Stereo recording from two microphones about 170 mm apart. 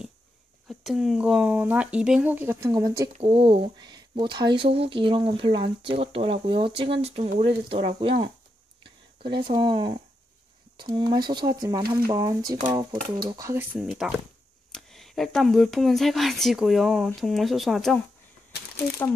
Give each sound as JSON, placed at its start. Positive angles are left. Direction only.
{"t": 0.7, "sound": "speech", "side_deg": 0}
{"t": 13.7, "sound": "speech", "side_deg": -5}